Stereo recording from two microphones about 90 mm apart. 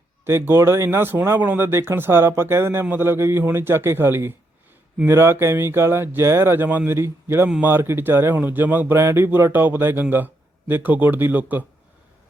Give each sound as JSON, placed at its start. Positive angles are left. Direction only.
{"t": 0.3, "sound": "speech", "side_deg": -30}